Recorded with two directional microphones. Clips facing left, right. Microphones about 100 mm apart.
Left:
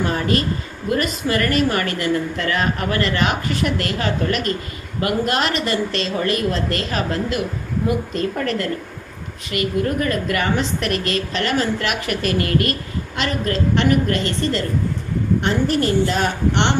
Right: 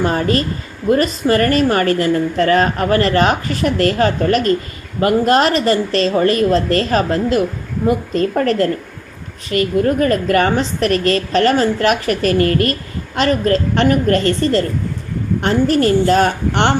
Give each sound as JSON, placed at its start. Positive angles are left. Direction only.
{"t": 0.0, "sound": "a woman's voice", "side_deg": -35}